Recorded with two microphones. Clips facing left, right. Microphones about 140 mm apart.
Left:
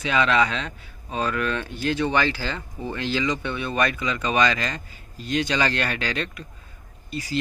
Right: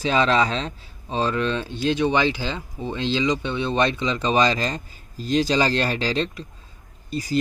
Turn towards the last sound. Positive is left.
turn(degrees=-40)  # may be behind; listen again after turning